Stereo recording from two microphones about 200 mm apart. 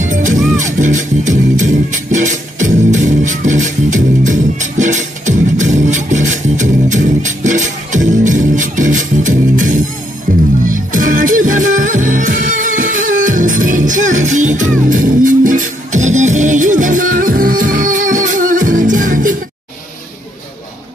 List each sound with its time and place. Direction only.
0.1 s music: 40° right (ahead or behind)